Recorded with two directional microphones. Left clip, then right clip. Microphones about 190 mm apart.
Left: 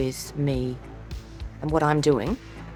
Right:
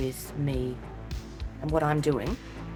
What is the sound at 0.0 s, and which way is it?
Speech, 45° left (ahead or behind).